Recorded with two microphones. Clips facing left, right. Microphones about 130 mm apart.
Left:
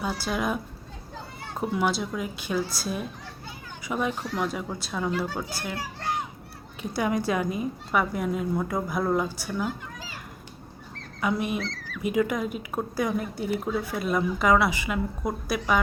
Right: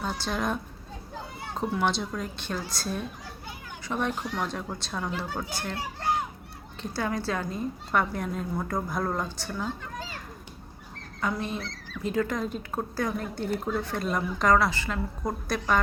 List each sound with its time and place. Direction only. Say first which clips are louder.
0.0 s a woman's voice: left 2 dB; 10° left (ahead or behind)
6.8 s a woman's voice: left 4 dB; 15° left (ahead or behind)
11.2 s a woman's voice: left 4 dB; 10° left (ahead or behind)
11.6 s rodents: left 5 dB; 20° right (ahead or behind)
12.0 s a woman's voice: left 3 dB; 10° left (ahead or behind)